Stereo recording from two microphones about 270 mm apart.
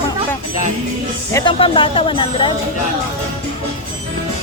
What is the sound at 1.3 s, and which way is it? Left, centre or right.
Speech, centre.